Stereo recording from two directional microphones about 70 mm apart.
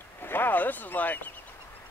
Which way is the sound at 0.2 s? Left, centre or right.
Left.